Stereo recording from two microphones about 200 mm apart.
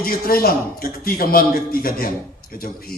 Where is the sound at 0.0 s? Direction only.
50° left (ahead or behind).